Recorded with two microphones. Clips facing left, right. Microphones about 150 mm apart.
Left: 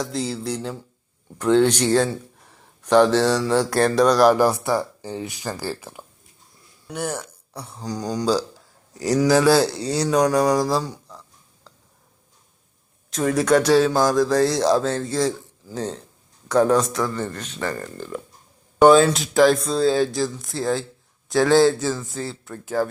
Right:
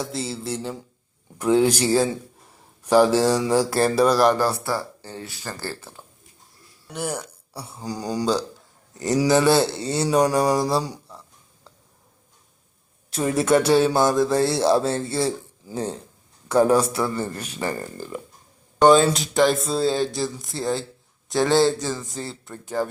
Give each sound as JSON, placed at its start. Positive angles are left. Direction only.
{"t": 0.0, "sound": "speech", "side_deg": 0}
{"t": 4.4, "sound": "speech", "side_deg": 15}
{"t": 6.8, "sound": "speech", "side_deg": -5}
{"t": 10.8, "sound": "a sound", "side_deg": -15}
{"t": 13.1, "sound": "speech", "side_deg": -5}